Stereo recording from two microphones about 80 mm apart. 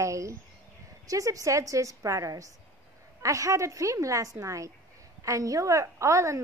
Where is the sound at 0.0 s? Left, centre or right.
Right.